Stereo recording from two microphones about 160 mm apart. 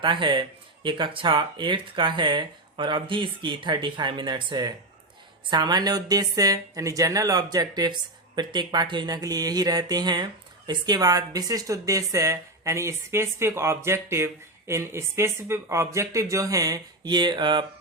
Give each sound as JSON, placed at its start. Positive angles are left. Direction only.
{"t": 0.0, "sound": "speech", "side_deg": -30}